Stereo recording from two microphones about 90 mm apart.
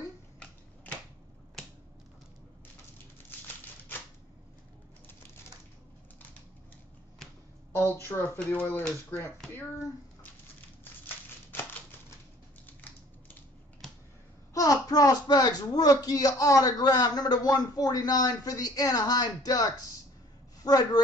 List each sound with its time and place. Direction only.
8.1 s speech: 25° left (ahead or behind)
14.5 s a child's voice: 40° left (ahead or behind)